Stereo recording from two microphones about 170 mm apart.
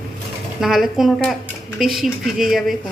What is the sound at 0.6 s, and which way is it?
A woman's voice, centre (ahead or behind).